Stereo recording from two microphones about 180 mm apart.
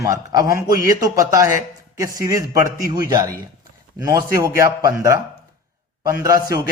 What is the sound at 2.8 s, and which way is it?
A man's voice, 20° right (ahead or behind).